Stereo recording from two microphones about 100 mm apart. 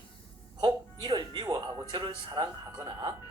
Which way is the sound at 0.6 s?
50° right (ahead or behind).